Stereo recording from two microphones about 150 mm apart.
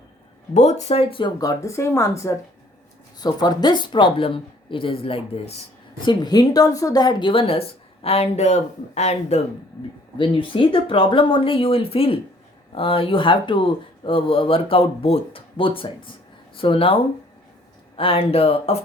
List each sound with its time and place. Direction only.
0.5 s speech: 50° left (ahead or behind)
1.4 s speech: 20° left (ahead or behind); by 5.4 s 40° left (ahead or behind)
6.1 s speech: 25° left (ahead or behind); by 9.4 s 50° left (ahead or behind)
10.2 s speech: 35° left (ahead or behind)